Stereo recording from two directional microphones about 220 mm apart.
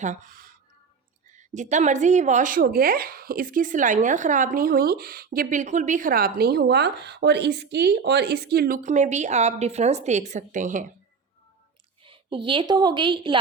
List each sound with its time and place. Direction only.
0.0 s speech: 35° right (ahead or behind)
1.5 s speech: 35° right (ahead or behind)
12.0 s a woman's voice: 25° right (ahead or behind)